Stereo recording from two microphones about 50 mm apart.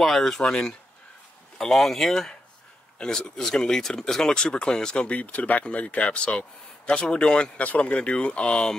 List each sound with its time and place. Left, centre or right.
0.0 s speech: centre